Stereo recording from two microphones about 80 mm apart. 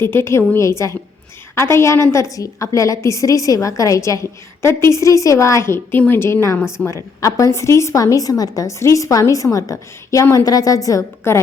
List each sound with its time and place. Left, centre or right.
0.0 s a woman's voice: left
6.6 s a woman's voice: centre
7.2 s a woman's voice: left
11.3 s a woman's voice: left